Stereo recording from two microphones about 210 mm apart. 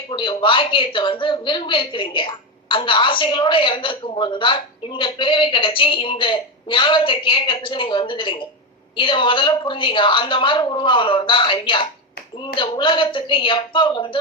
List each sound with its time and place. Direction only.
0.1 s a woman's voice: 25° left (ahead or behind)